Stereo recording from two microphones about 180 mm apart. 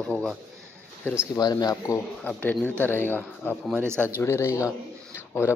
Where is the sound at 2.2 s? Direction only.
5° left (ahead or behind).